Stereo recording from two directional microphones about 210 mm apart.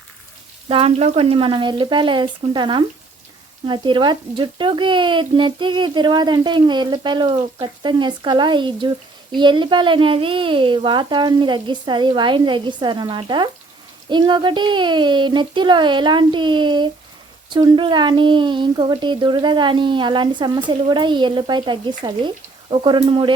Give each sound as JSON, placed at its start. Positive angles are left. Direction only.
{"t": 0.7, "sound": "speech", "side_deg": -25}